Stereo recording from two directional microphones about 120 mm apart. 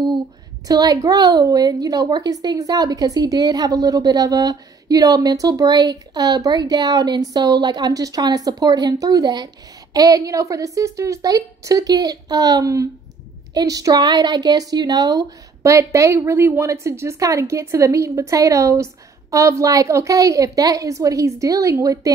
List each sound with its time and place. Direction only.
0.7 s a woman's voice: 30° right (ahead or behind)